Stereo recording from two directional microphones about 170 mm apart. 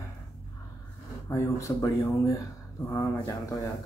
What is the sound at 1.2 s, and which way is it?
Speech, 15° left (ahead or behind).